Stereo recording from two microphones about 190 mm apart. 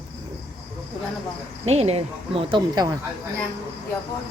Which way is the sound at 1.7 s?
35° right (ahead or behind).